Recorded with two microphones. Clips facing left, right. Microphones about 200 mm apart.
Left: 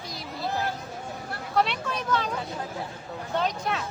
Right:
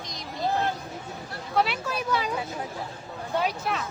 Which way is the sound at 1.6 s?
5° right (ahead or behind).